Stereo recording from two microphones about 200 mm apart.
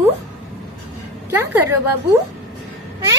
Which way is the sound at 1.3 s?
10° right (ahead or behind).